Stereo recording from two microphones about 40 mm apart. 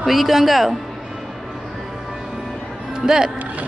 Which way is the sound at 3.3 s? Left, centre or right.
Right.